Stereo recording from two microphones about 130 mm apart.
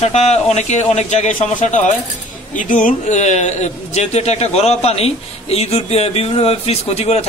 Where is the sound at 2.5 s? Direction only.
80° left.